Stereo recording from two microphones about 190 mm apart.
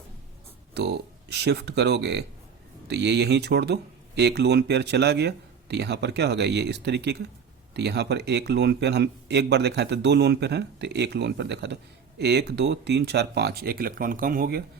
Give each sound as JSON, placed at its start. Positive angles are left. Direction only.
{"t": 0.7, "sound": "speech", "side_deg": -60}